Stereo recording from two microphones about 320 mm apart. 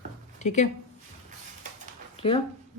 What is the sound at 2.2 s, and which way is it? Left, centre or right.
Speech, centre.